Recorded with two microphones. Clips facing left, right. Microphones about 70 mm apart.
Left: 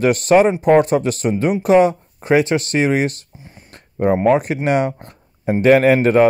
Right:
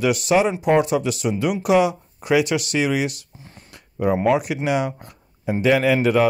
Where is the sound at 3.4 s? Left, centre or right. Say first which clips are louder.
Left 2 dB; centre.